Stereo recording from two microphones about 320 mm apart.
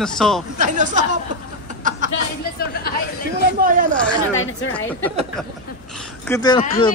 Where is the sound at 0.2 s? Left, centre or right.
Centre.